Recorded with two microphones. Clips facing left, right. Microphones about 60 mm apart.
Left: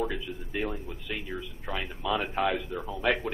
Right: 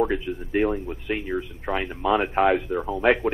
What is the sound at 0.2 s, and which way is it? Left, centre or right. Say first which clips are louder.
A man's voice: right 10 dB; right.